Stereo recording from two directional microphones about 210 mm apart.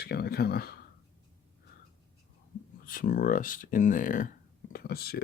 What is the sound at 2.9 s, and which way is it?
Speech, 40° left (ahead or behind).